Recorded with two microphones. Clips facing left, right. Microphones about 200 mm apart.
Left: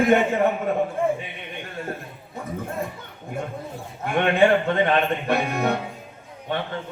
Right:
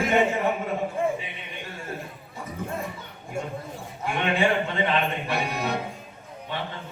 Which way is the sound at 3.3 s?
55° left (ahead or behind).